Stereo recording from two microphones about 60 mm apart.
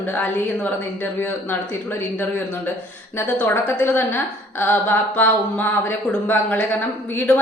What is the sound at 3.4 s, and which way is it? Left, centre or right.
A woman's voice, left.